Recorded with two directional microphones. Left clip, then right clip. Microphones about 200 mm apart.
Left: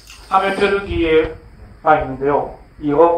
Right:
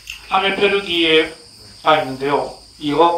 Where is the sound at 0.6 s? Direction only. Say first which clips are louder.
Right 1 dB; 30° right (ahead or behind).